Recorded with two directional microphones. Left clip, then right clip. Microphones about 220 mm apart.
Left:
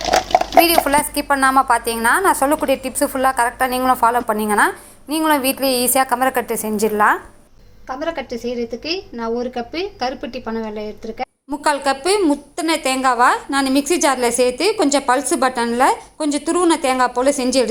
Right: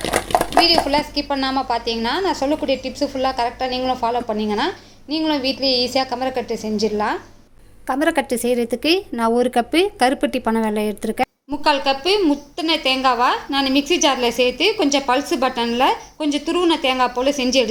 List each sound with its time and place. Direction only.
0.3 s a woman's voice: 5° left (ahead or behind)
6.5 s a woman's voice: 30° left (ahead or behind)
7.9 s a woman's voice: 45° right (ahead or behind)
11.6 s a woman's voice: 10° left (ahead or behind)